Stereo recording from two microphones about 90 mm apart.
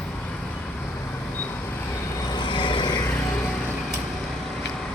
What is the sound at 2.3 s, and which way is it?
Vehicle, 60° left (ahead or behind).